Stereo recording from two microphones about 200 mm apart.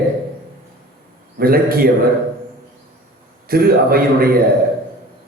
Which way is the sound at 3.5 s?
50° right (ahead or behind).